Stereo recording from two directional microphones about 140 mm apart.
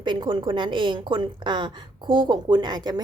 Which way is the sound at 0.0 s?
35° right (ahead or behind).